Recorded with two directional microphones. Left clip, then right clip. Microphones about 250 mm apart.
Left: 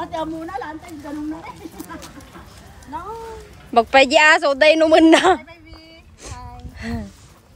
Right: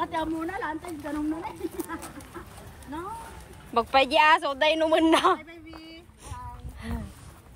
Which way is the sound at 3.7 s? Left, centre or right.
Centre.